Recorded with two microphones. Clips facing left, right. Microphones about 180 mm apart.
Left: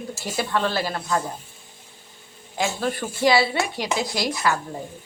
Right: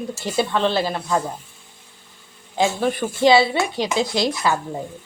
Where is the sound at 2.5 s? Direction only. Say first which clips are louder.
Right 5 dB; 25° right (ahead or behind).